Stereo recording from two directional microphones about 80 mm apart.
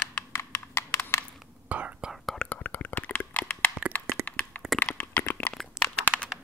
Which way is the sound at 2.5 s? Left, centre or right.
Left.